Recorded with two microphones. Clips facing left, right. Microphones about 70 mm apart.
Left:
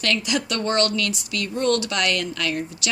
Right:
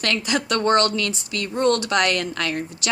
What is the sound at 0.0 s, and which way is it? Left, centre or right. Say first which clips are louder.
Speech: right 1 dB; right.